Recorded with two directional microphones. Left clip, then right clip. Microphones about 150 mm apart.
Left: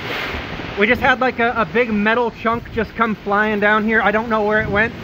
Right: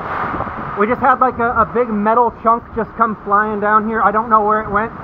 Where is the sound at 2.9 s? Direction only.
35° left (ahead or behind).